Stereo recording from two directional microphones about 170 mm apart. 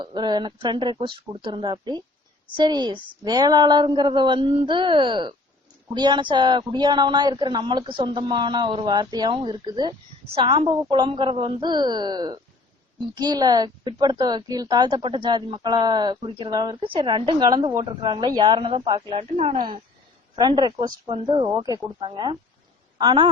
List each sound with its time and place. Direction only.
0.0 s a woman's voice: 25° right (ahead or behind)